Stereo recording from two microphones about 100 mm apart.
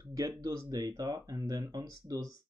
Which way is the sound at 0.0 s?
40° right (ahead or behind).